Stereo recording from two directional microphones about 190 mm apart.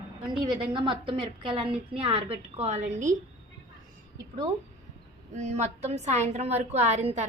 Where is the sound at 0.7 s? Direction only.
25° right (ahead or behind).